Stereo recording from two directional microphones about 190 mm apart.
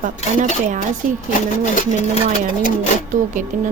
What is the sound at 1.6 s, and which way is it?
Speech, 40° left (ahead or behind).